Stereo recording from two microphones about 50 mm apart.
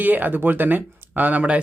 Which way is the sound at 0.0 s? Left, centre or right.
Right.